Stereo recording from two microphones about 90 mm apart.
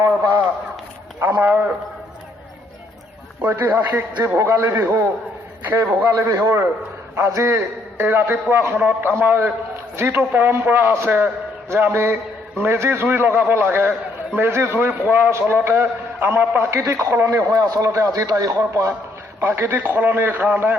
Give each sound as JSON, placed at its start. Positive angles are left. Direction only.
{"t": 1.4, "sound": "a sound", "side_deg": -20}
{"t": 3.4, "sound": "a man's voice", "side_deg": -20}
{"t": 17.2, "sound": "a man's voice", "side_deg": -45}
{"t": 19.4, "sound": "a man's voice", "side_deg": -25}